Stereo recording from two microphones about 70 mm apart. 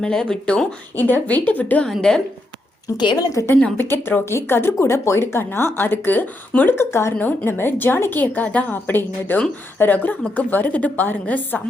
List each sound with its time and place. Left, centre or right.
0.0 s speech: centre
0.9 s a woman's voice: left
1.9 s speech: centre
3.0 s speech: left
3.8 s a woman's voice: left
6.7 s a woman's voice: left